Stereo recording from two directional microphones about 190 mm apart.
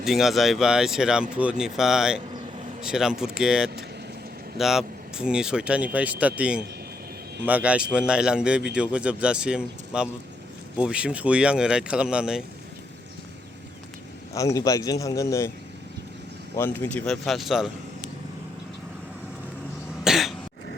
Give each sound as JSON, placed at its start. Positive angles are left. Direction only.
{"t": 0.0, "sound": "a man's voice", "side_deg": 0}
{"t": 14.3, "sound": "a man's voice", "side_deg": 15}
{"t": 16.6, "sound": "a man's voice", "side_deg": 10}
{"t": 20.1, "sound": "cough", "side_deg": 0}